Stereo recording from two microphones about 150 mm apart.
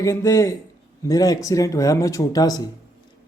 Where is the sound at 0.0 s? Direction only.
20° left (ahead or behind).